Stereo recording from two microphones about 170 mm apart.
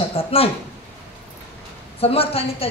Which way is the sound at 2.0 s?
35° left (ahead or behind).